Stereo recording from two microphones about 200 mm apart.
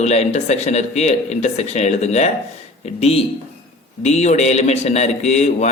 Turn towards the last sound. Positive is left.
turn(degrees=35)  # may be behind; listen again after turning